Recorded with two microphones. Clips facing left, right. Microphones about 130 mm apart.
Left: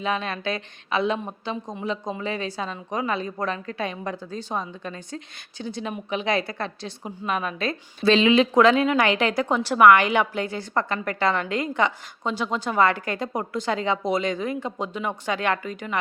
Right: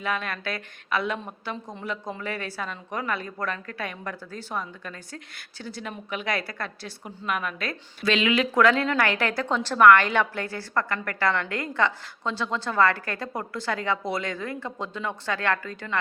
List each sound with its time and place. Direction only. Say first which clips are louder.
0.0 s a woman's voice: left 3 dB; 20° left (ahead or behind)